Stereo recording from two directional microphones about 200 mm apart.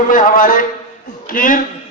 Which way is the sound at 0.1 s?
40° left (ahead or behind).